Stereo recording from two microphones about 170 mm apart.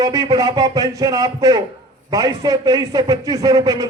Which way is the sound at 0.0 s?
25° right (ahead or behind).